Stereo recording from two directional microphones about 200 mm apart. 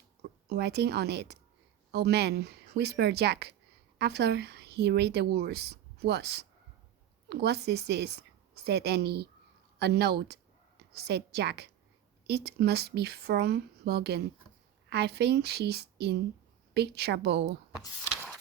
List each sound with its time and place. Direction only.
0.2 s a woman's voice: 55° right (ahead or behind)